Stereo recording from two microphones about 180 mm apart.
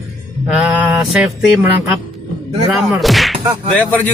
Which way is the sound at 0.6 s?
5° right (ahead or behind).